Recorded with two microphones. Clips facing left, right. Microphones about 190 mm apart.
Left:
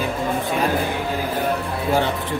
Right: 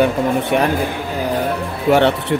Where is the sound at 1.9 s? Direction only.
75° right (ahead or behind).